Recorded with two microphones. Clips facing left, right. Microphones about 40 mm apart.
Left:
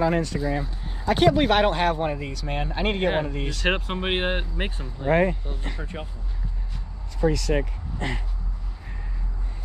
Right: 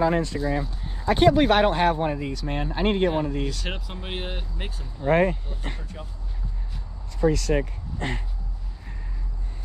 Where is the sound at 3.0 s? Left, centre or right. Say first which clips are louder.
Right 1 dB; left.